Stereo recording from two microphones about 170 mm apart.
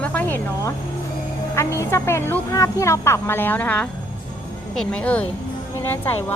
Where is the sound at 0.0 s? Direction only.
10° left (ahead or behind).